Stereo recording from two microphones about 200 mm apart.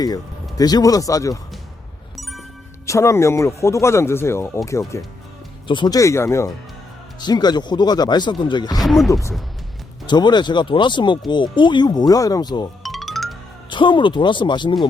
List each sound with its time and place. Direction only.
0.5 s speech: 20° left (ahead or behind)
2.1 s music: centre (ahead or behind)
2.8 s speech: 15° left (ahead or behind)
8.8 s speech: centre (ahead or behind)
10.1 s speech: 20° left (ahead or behind)
12.8 s music: centre (ahead or behind)
13.7 s speech: 25° left (ahead or behind)